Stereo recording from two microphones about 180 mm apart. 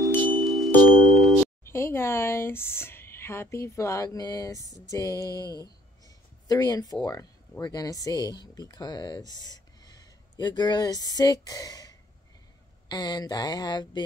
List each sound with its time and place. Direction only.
0.4 s wind chime: centre (ahead or behind)
0.8 s music: centre (ahead or behind)
1.6 s speech: 15° left (ahead or behind)
12.9 s mantra: 25° left (ahead or behind)